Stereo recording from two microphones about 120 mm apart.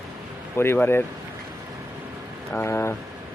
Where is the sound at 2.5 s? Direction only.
20° left (ahead or behind).